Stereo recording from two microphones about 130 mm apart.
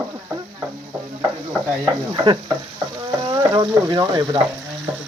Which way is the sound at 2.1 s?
35° right (ahead or behind).